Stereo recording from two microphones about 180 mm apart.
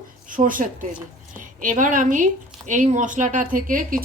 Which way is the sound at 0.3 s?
50° right (ahead or behind).